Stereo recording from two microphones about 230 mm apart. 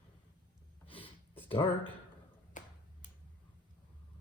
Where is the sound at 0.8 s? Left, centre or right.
Left.